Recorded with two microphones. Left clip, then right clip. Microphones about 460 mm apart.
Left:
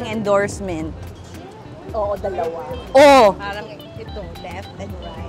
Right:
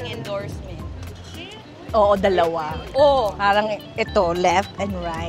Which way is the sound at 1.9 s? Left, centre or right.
Right.